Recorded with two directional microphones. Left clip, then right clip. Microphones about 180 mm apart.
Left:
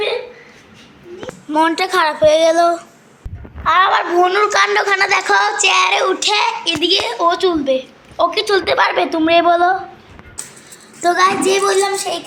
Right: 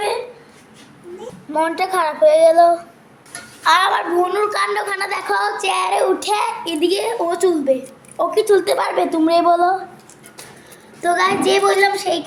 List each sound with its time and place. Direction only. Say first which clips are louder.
1.5 s child singing: left 4 dB; 5° left (ahead or behind)
3.6 s a child's voice: left 2 dB; 5° right (ahead or behind)
4.2 s child singing: left 5 dB; 15° left (ahead or behind); by 9.4 s 5° right (ahead or behind)
9.4 s speech: left 2 dB; 25° left (ahead or behind)
11.0 s child singing: left 3 dB; 50° left (ahead or behind)